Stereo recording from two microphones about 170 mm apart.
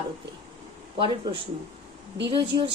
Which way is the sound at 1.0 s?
30° right (ahead or behind).